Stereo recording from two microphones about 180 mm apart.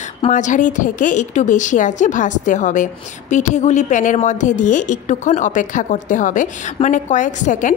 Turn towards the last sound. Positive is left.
turn(degrees=45)  # may be behind; listen again after turning